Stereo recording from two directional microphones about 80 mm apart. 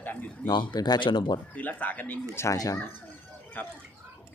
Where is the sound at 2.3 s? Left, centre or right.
Left.